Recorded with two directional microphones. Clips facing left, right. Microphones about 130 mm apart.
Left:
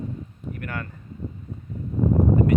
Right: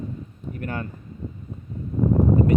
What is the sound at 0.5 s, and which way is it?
Speech, 25° right (ahead or behind).